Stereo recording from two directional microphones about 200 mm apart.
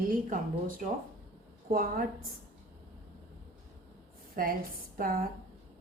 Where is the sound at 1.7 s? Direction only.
45° right (ahead or behind).